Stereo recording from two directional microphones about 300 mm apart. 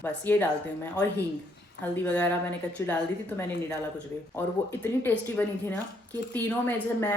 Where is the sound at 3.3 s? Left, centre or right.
Centre.